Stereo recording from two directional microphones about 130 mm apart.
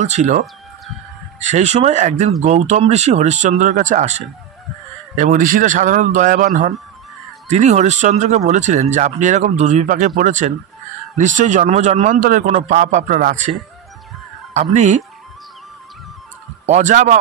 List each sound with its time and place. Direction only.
0.0 s speech: 60° right (ahead or behind)
1.4 s speech: 65° right (ahead or behind)
5.1 s a man's voice: 85° right
7.4 s a man's voice: 60° right (ahead or behind); by 13.5 s 80° right
14.5 s speech: 60° right (ahead or behind)
16.6 s a man's voice: 65° right (ahead or behind)